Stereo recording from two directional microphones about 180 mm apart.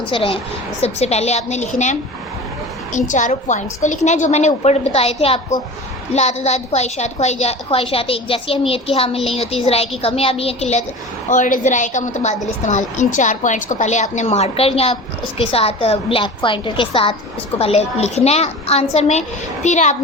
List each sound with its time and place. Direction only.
0.1 s a woman's voice: 30° left (ahead or behind)